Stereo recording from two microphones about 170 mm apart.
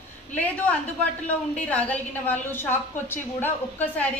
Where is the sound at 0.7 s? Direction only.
5° left (ahead or behind).